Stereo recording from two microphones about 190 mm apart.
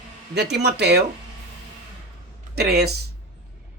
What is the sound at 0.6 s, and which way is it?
Speech, 60° right (ahead or behind).